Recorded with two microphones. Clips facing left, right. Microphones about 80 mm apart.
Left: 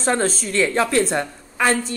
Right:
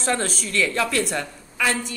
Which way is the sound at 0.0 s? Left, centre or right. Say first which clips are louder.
Left 4 dB; left.